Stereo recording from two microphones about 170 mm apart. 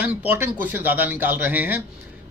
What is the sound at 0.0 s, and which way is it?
Speech, 10° right (ahead or behind).